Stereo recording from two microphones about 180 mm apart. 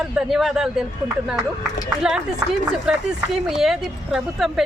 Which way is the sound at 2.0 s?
5° right (ahead or behind).